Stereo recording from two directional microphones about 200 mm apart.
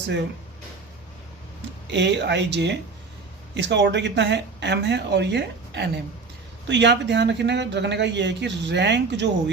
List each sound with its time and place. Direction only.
1.9 s speech: 60° right (ahead or behind)